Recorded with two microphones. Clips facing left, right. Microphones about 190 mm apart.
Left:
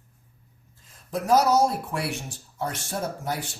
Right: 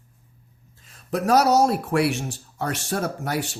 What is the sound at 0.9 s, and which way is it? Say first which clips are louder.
Speech: right 2 dB; 75° right (ahead or behind).